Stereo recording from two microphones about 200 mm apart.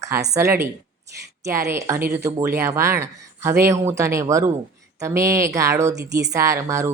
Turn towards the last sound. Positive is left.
turn(degrees=-15)  # may be behind; listen again after turning